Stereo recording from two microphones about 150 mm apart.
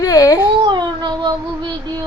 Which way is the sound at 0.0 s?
25° left (ahead or behind).